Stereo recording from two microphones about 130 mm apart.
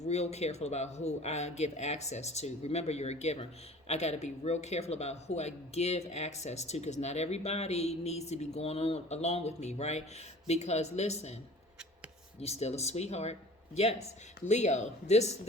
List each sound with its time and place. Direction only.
0.0 s speech: 55° left (ahead or behind)
12.4 s speech: 55° left (ahead or behind)
14.4 s speech: 60° left (ahead or behind)